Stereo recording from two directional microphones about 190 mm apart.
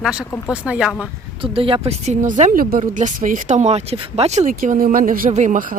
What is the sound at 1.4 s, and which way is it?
Speech, 30° right (ahead or behind).